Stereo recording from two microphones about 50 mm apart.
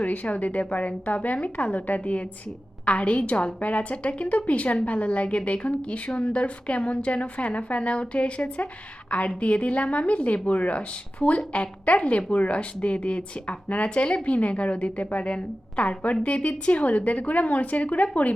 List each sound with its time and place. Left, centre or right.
0.0 s a woman's voice: left